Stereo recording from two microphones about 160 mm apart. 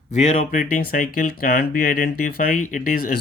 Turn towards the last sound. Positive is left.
turn(degrees=60)  # may be behind; listen again after turning